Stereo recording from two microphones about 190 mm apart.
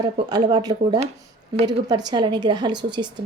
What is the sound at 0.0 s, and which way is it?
Speech, 20° right (ahead or behind).